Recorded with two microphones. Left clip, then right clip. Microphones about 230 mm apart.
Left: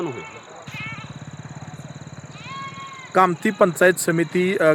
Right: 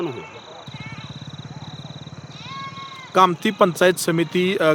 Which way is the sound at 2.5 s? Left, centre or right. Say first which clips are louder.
Even; right.